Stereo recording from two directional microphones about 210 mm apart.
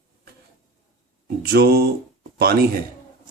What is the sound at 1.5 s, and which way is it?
Speech, 50° right (ahead or behind).